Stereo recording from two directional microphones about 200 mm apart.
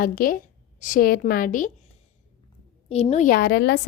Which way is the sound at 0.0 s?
45° left (ahead or behind).